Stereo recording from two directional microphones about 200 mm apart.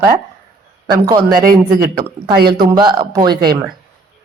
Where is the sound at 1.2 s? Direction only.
45° right (ahead or behind).